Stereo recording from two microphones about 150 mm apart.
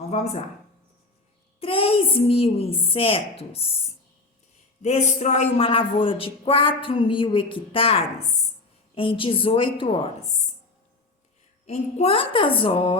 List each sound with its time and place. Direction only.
0.1 s speech: 45° left (ahead or behind)
1.6 s speech: 40° left (ahead or behind)
4.8 s speech: 50° left (ahead or behind)
9.0 s speech: 35° left (ahead or behind)
11.6 s speech: 45° left (ahead or behind)